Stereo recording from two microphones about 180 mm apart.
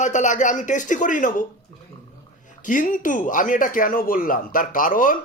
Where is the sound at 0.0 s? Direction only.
45° left (ahead or behind).